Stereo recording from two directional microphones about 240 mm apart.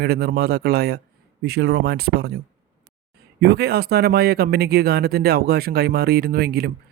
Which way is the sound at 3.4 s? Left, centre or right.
Right.